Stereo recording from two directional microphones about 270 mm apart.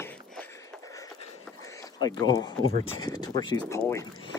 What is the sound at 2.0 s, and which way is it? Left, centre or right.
Speech, centre.